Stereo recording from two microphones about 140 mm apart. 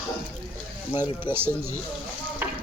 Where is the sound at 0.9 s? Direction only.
15° right (ahead or behind).